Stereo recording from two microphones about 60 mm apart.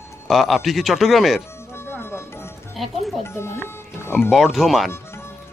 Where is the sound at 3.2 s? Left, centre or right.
Left.